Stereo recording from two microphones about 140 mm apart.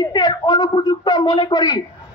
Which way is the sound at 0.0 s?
30° left (ahead or behind).